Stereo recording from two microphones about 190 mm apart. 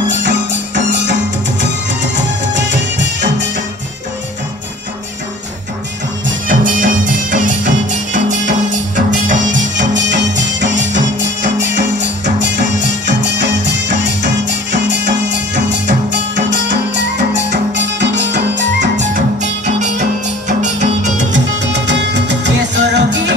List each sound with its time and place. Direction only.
0.5 s music: 70° right (ahead or behind)
2.1 s music: 65° right (ahead or behind)
6.2 s music: 45° right (ahead or behind)
9.5 s music: 75° right (ahead or behind)
18.9 s music: 40° right (ahead or behind)
22.6 s music: 65° right (ahead or behind)